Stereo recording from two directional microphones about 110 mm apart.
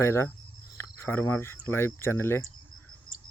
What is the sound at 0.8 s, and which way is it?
Cricket, 20° left (ahead or behind).